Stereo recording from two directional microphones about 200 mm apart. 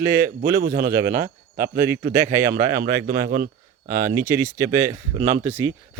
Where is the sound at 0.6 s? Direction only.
45° right (ahead or behind).